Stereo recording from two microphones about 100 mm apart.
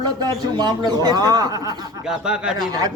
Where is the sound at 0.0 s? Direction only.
45° right (ahead or behind).